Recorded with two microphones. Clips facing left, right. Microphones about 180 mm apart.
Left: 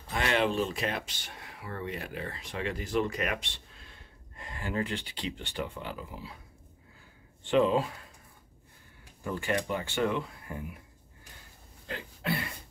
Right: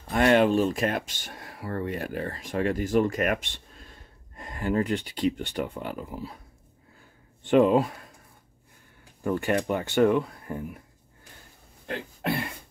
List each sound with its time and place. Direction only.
0.1 s speech: 50° right (ahead or behind)
7.4 s speech: 50° right (ahead or behind)
9.2 s speech: 50° right (ahead or behind)
11.9 s speech: 65° right (ahead or behind)